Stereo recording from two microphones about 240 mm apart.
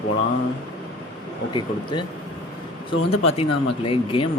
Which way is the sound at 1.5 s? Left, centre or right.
Centre.